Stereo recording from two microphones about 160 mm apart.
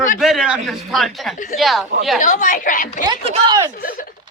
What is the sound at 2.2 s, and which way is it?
Speech, 55° left (ahead or behind).